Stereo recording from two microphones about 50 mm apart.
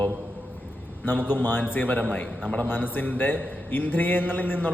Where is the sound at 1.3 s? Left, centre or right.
Left.